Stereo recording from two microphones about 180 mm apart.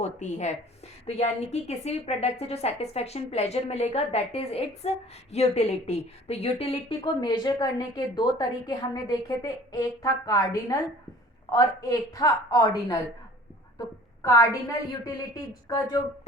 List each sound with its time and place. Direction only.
0.0 s a woman's voice: 40° left (ahead or behind); by 10.8 s 20° left (ahead or behind)
11.8 s a woman's voice: 20° left (ahead or behind)